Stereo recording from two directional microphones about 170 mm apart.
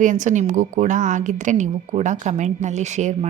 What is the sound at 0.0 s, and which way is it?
A woman's voice, 45° right (ahead or behind).